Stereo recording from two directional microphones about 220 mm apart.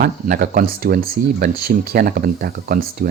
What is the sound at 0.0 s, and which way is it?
Speech, 40° right (ahead or behind).